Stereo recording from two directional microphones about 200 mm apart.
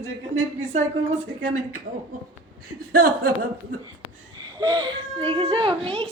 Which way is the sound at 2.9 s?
50° right (ahead or behind).